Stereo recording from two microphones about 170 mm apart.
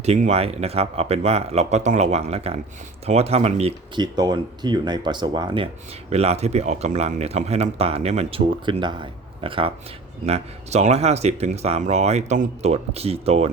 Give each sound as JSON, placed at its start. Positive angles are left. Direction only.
{"t": 0.0, "sound": "speech", "side_deg": -40}
{"t": 4.0, "sound": "speech", "side_deg": -25}
{"t": 6.1, "sound": "speech", "side_deg": -40}